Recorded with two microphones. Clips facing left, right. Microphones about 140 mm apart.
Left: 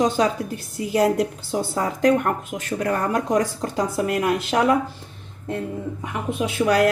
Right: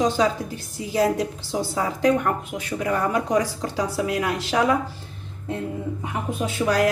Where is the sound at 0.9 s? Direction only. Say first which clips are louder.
Left 2 dB; 60° left (ahead or behind).